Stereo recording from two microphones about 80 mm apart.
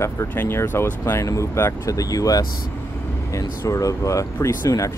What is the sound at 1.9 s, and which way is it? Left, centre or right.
Speech, left.